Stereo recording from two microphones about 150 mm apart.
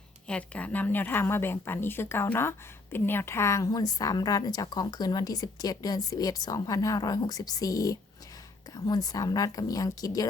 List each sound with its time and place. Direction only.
0.3 s a woman's voice: 10° left (ahead or behind); by 10.2 s 25° left (ahead or behind)